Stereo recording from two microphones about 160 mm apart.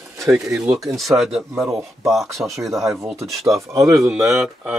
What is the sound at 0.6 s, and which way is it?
Speech, centre (ahead or behind).